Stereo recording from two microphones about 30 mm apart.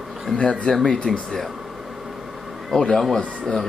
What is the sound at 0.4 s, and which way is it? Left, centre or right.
Speech, left.